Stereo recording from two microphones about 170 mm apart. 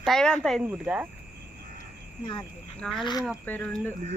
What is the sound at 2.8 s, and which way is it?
Speech, centre (ahead or behind).